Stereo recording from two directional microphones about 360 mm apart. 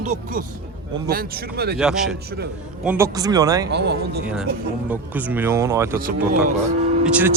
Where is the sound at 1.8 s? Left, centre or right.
Centre.